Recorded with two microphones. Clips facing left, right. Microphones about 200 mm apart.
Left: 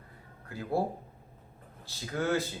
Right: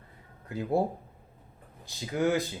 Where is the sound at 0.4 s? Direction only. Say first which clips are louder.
Right 4 dB; 20° right (ahead or behind).